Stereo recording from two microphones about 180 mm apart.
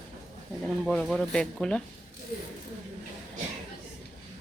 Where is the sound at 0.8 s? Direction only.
Centre (ahead or behind).